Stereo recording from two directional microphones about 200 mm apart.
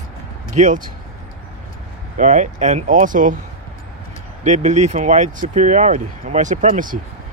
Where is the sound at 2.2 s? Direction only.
35° right (ahead or behind).